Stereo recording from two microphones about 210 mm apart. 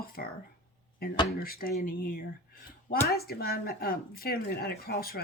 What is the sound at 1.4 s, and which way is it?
Speech, 45° left (ahead or behind).